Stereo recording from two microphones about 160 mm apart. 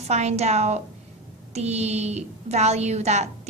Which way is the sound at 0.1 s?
45° right (ahead or behind).